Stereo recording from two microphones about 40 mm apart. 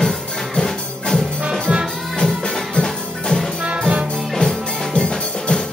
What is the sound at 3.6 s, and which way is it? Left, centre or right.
Music, right.